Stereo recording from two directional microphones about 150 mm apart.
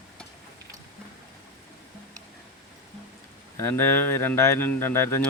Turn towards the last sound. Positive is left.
turn(degrees=15)  # may be behind; listen again after turning